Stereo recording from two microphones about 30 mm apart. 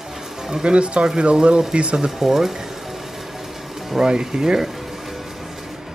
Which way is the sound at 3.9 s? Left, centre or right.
Centre.